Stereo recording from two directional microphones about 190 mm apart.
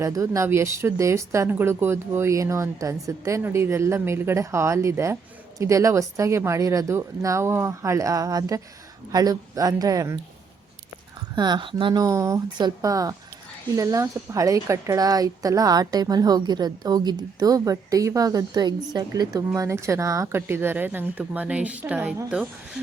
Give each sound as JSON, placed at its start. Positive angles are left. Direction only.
{"t": 0.0, "sound": "a woman's voice", "side_deg": -15}
{"t": 11.3, "sound": "a woman's voice", "side_deg": -25}